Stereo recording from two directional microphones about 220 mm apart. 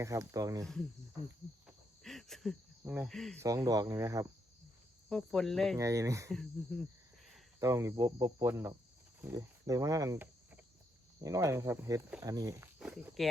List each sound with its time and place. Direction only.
0.0 s speech: 15° right (ahead or behind)
0.6 s cricket: centre (ahead or behind)
3.4 s speech: 15° right (ahead or behind)
5.0 s cricket: centre (ahead or behind)
5.7 s speech: 15° right (ahead or behind)
6.3 s cricket: centre (ahead or behind)
7.6 s speech: 15° right (ahead or behind)